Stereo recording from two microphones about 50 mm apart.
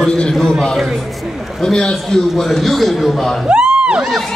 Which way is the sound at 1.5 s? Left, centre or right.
Centre.